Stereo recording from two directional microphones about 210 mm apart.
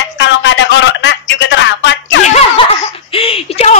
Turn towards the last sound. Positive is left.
turn(degrees=30)  # may be behind; listen again after turning